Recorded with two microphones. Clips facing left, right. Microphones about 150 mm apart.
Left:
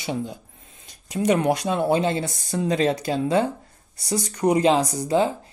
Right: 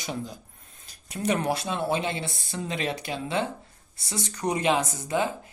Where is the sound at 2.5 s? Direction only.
40° left (ahead or behind).